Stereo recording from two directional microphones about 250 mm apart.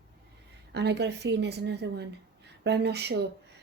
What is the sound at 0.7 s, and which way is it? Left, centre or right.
A woman's voice, right.